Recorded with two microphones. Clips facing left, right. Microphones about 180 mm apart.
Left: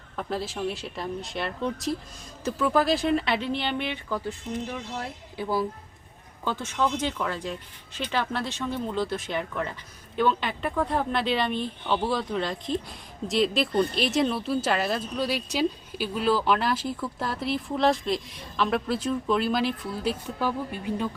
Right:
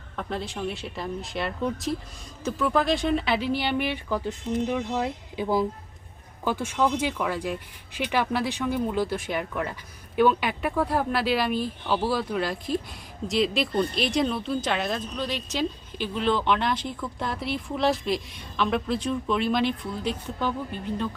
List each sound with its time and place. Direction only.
0.2 s speech: 5° left (ahead or behind)
5.4 s speech: 15° right (ahead or behind); by 21.1 s 10° left (ahead or behind)